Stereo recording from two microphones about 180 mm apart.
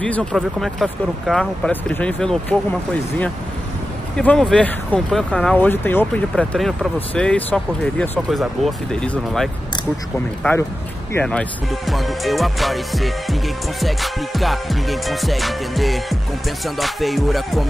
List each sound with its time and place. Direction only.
0.0 s speech: 5° left (ahead or behind)